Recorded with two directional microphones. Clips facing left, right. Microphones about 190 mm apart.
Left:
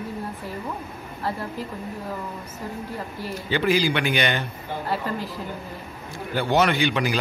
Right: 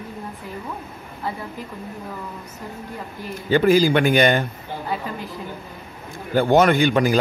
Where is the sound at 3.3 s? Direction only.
45° right (ahead or behind).